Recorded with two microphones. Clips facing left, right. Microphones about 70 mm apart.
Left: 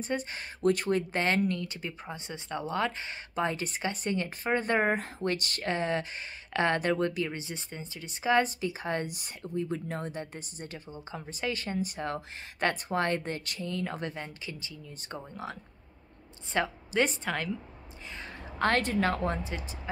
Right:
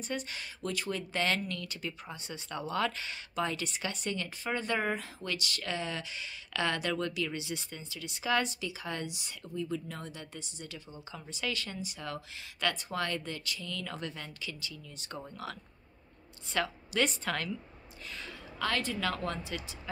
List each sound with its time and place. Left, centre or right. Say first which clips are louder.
0.0 s speech: left 4 dB; left
16.5 s a woman's voice: left 3 dB; left
18.6 s a woman's voice: left 6 dB; left
19.0 s speech: left 5 dB; left